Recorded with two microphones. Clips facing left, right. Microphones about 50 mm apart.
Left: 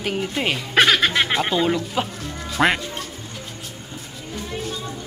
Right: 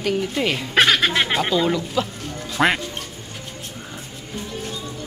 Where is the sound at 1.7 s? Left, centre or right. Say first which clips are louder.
Right 1 dB; left.